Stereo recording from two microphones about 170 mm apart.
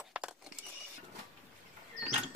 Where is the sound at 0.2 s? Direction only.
5° right (ahead or behind).